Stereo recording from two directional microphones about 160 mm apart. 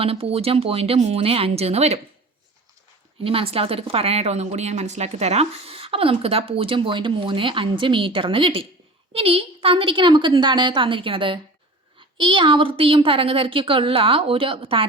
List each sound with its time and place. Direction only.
0.0 s a woman's voice: 35° right (ahead or behind)
3.2 s a woman's voice: 35° right (ahead or behind)